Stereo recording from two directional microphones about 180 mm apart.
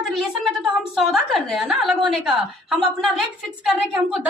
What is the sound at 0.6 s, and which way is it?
A woman's voice, centre (ahead or behind).